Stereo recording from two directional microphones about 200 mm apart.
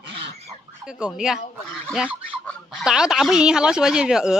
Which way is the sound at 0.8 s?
5° right (ahead or behind).